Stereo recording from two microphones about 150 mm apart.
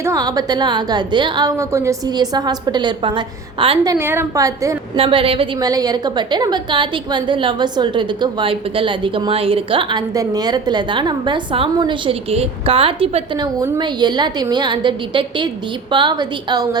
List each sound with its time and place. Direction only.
0.0 s a woman's voice: 25° right (ahead or behind)
3.8 s a woman's voice: 15° right (ahead or behind)
4.9 s a woman's voice: 35° right (ahead or behind)
5.5 s a woman's voice: 25° right (ahead or behind)